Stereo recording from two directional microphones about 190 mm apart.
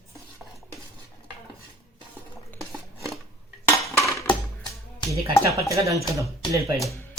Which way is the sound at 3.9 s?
15° left (ahead or behind).